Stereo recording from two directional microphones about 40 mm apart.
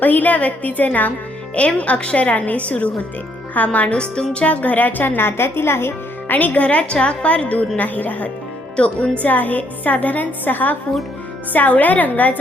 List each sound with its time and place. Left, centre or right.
0.0 s a woman's voice: left
3.9 s speech: left
4.4 s a woman's voice: left
5.1 s a woman's voice: left
6.3 s a woman's voice: left
7.8 s a woman's voice: left
8.7 s speech: left
9.2 s a woman's voice: left